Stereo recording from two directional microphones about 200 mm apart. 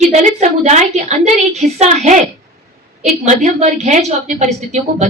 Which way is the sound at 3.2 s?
35° right (ahead or behind).